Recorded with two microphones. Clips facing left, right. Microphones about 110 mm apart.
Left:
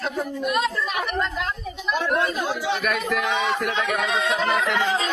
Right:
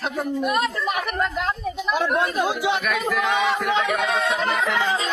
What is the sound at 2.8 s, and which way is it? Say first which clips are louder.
Speech: right 1 dB; centre (ahead or behind).